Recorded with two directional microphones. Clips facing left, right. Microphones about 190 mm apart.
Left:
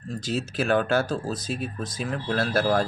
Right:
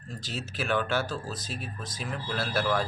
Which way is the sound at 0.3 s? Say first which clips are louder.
Left 7 dB; 45° left (ahead or behind).